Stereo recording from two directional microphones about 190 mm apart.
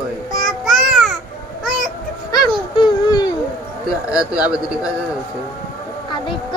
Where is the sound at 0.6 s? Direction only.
Centre (ahead or behind).